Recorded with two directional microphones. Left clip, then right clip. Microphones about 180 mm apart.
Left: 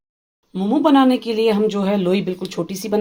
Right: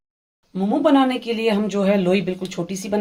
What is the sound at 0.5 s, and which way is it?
Speech, 30° left (ahead or behind).